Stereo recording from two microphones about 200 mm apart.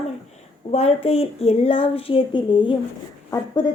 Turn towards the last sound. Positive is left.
turn(degrees=20)  # may be behind; listen again after turning